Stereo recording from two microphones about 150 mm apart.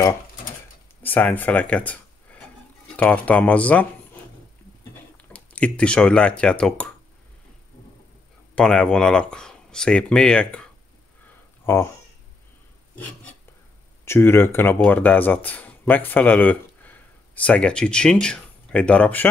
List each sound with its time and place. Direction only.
1.0 s speech: 10° left (ahead or behind)
3.0 s speech: 10° left (ahead or behind)
5.1 s speech: 10° left (ahead or behind)
8.5 s speech: 5° left (ahead or behind)
11.6 s speech: 15° left (ahead or behind)
12.9 s a sound: 10° left (ahead or behind)
14.0 s speech: 15° left (ahead or behind)